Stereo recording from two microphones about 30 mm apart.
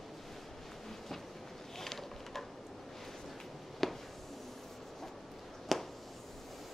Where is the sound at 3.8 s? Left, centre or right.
Centre.